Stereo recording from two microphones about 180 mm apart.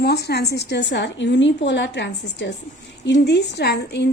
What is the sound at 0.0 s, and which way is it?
A woman's voice, 65° left (ahead or behind).